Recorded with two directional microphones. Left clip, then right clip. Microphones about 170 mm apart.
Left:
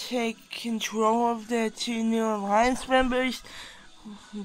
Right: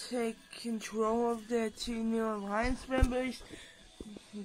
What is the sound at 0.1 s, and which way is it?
Speech, 30° left (ahead or behind).